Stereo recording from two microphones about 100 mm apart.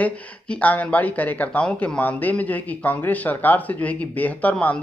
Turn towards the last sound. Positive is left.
turn(degrees=10)  # may be behind; listen again after turning